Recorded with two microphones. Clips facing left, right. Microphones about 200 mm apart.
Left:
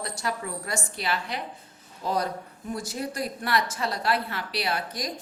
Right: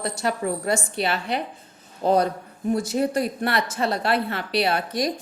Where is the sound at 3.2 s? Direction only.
65° right (ahead or behind).